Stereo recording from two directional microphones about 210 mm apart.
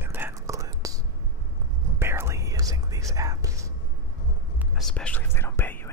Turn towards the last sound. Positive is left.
turn(degrees=10)  # may be behind; listen again after turning